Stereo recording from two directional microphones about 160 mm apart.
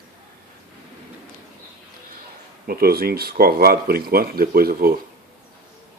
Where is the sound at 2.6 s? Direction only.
70° right (ahead or behind).